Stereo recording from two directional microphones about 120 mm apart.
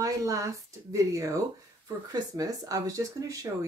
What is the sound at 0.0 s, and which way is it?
Speech, 30° right (ahead or behind).